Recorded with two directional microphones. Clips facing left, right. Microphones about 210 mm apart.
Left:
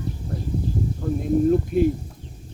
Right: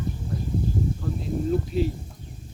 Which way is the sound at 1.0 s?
45° left (ahead or behind).